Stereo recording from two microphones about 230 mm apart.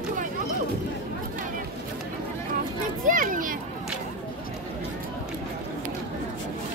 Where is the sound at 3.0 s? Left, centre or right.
Right.